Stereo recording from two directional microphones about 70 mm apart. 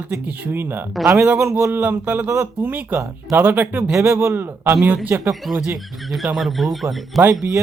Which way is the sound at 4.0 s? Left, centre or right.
Right.